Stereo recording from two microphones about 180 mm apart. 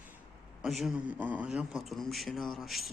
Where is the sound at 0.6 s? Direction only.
Centre (ahead or behind).